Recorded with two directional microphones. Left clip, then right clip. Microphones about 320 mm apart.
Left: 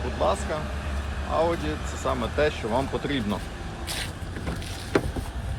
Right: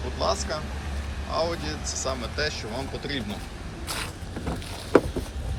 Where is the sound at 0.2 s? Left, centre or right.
Centre.